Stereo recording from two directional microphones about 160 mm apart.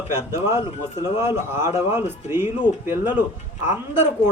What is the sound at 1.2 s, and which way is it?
Speech, 15° right (ahead or behind).